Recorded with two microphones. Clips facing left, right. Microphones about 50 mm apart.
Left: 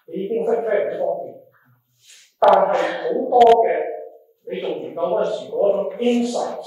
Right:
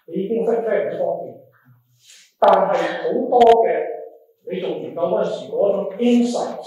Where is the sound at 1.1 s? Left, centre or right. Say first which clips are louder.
Even; centre.